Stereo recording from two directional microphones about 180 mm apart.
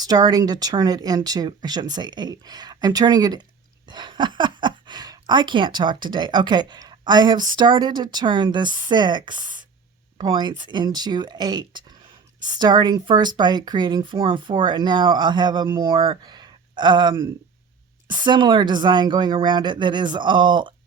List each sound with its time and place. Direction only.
0.0 s speech: 20° right (ahead or behind)